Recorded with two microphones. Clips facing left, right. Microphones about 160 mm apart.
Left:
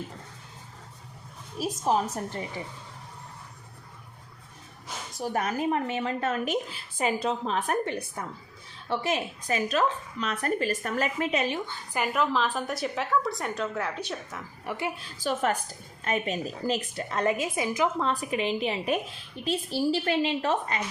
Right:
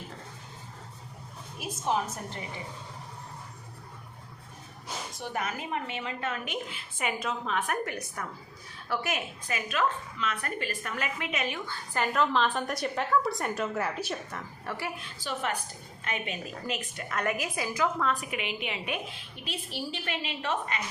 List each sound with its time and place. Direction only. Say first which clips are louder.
1.5 s a woman's voice: left 4 dB; 35° left (ahead or behind)
5.2 s a woman's voice: left 8 dB; 40° left (ahead or behind)
11.7 s a woman's voice: left 1 dB; 10° left (ahead or behind)
14.6 s a woman's voice: left 4 dB; 15° left (ahead or behind)
15.2 s a woman's voice: left 6 dB; 45° left (ahead or behind)